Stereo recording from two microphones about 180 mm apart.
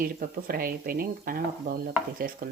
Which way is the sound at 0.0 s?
55° right (ahead or behind).